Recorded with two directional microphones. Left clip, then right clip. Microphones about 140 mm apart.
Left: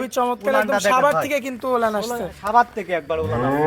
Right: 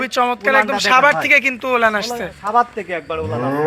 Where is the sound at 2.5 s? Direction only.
50° left (ahead or behind).